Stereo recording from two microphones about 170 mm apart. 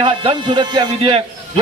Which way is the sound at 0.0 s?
30° right (ahead or behind).